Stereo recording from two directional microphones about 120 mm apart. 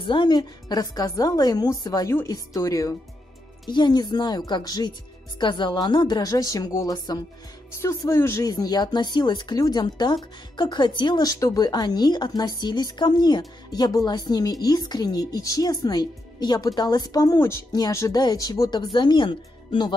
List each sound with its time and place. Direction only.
0.0 s a woman's voice: 40° left (ahead or behind); by 3.0 s 25° left (ahead or behind)
3.6 s speech: 40° left (ahead or behind)